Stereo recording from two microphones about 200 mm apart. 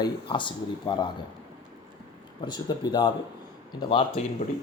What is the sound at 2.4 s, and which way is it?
A man's voice, 20° left (ahead or behind).